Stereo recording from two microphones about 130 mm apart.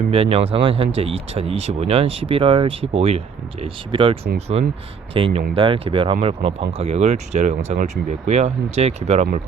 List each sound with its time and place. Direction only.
0.1 s speech: 50° right (ahead or behind); by 9.4 s 65° right (ahead or behind)